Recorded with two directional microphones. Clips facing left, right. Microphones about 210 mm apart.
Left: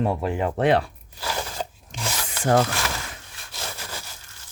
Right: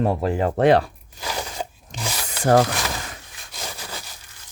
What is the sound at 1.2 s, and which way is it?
Crunch, 15° right (ahead or behind).